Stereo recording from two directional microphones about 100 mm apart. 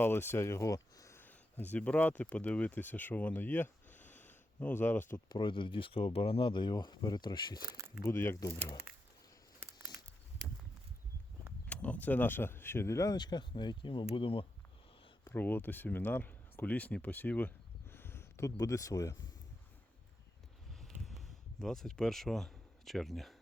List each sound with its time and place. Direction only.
0.0 s speech: 25° left (ahead or behind)
1.2 s speech: 15° left (ahead or behind)
5.3 s speech: 55° left (ahead or behind)
8.0 s speech: 25° left (ahead or behind)
11.6 s speech: 15° left (ahead or behind); by 14.0 s 50° left (ahead or behind)
14.0 s speech: 70° left (ahead or behind)
15.3 s speech: 20° left (ahead or behind); by 19.2 s 35° left (ahead or behind)
20.8 s a sound: centre (ahead or behind)